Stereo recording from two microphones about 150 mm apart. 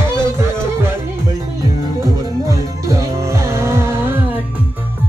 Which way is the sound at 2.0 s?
20° right (ahead or behind).